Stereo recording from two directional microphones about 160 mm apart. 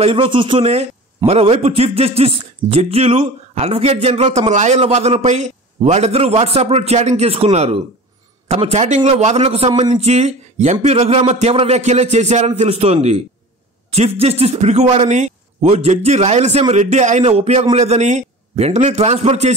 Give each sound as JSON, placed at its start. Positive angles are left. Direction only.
{"t": 0.0, "sound": "a man's voice", "side_deg": -35}
{"t": 9.7, "sound": "a man's voice", "side_deg": -25}
{"t": 9.9, "sound": "a man's voice", "side_deg": -45}